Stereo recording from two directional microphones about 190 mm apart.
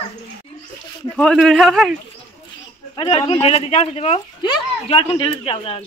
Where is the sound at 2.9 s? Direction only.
30° left (ahead or behind).